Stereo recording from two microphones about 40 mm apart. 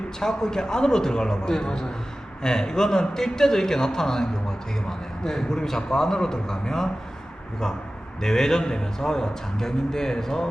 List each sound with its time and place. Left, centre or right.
0.2 s a man's voice: centre
8.2 s a man's voice: centre